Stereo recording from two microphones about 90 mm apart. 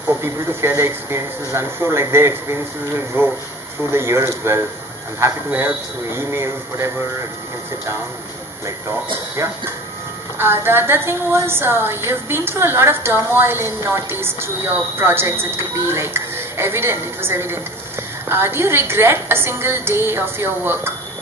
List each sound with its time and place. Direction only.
0.2 s a woman's voice: 30° right (ahead or behind)
9.4 s a woman's voice: 30° right (ahead or behind)